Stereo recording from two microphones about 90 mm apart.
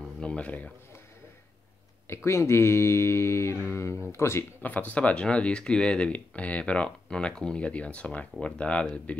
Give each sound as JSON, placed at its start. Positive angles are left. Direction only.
{"t": 0.2, "sound": "speech", "side_deg": 15}
{"t": 2.0, "sound": "speech", "side_deg": 30}
{"t": 4.6, "sound": "speech", "side_deg": 15}